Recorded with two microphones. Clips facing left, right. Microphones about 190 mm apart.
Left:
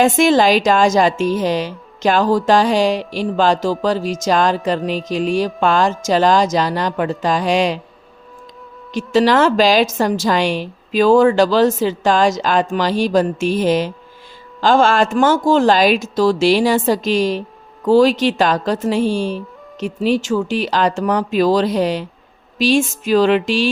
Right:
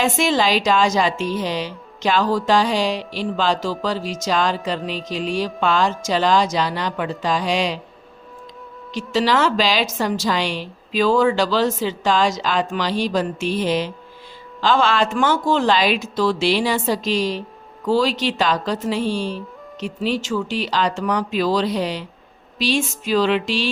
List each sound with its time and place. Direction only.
0.0 s a woman's voice: 50° left (ahead or behind)
8.9 s a woman's voice: 50° left (ahead or behind)